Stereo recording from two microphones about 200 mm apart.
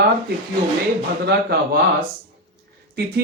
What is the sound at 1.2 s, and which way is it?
Speech, 55° right (ahead or behind).